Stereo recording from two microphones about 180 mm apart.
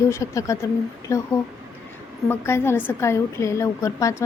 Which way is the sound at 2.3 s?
15° left (ahead or behind).